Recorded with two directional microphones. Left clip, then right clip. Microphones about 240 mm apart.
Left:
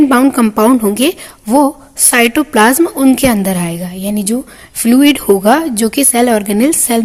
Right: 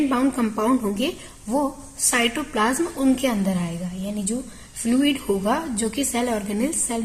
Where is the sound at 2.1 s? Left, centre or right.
Left.